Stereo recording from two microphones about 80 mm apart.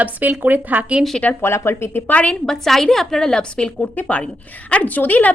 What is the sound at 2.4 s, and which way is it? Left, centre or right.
A woman's voice, centre.